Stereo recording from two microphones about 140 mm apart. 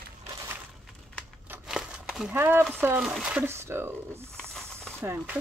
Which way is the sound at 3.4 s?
20° right (ahead or behind).